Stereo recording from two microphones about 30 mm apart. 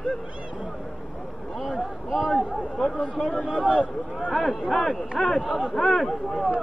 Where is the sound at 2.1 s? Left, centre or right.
Centre.